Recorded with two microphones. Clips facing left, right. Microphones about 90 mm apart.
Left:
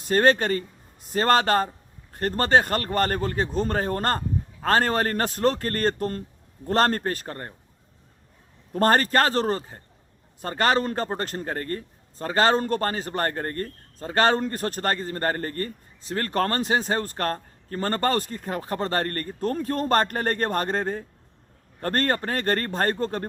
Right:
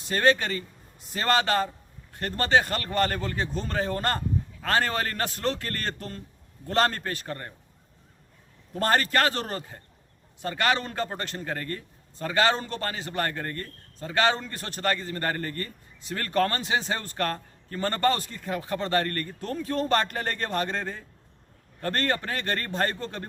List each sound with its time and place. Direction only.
0.0 s a man's voice: 45° left (ahead or behind)
8.7 s a man's voice: 45° left (ahead or behind)